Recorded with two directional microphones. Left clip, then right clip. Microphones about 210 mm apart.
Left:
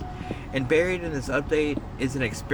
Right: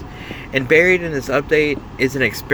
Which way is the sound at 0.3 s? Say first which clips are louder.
Right 9 dB; 15° right (ahead or behind).